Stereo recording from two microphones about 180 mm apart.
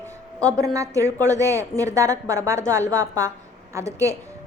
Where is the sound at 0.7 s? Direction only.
15° right (ahead or behind).